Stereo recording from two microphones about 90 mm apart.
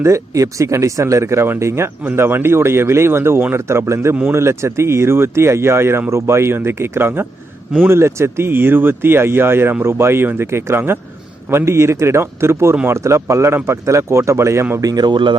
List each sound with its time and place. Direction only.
0.0 s speech: 35° right (ahead or behind)
14.8 s speech: 50° right (ahead or behind)